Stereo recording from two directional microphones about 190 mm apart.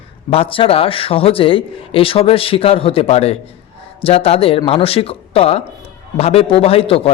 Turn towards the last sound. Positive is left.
turn(degrees=30)  # may be behind; listen again after turning